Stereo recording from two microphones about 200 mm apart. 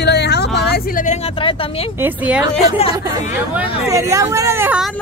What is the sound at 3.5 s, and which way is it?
Speech, 15° right (ahead or behind).